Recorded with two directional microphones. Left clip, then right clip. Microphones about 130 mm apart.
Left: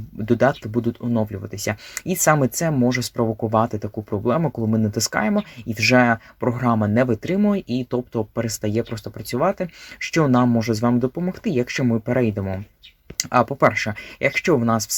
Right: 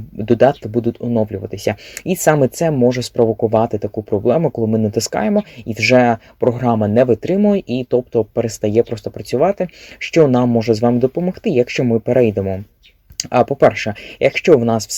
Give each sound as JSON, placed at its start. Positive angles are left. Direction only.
{"t": 0.3, "sound": "speech", "side_deg": -20}